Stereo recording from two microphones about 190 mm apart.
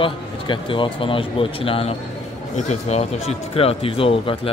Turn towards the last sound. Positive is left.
turn(degrees=30)  # may be behind; listen again after turning